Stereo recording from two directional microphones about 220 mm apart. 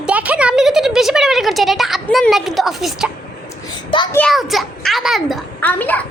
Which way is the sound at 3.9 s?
20° left (ahead or behind).